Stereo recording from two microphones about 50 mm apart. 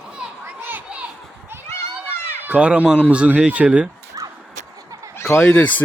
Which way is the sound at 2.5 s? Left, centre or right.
Right.